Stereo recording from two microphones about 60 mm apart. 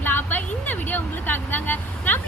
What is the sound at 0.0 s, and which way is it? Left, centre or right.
Speech, left.